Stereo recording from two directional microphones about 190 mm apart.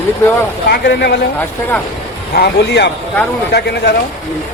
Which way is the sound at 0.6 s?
60° left (ahead or behind).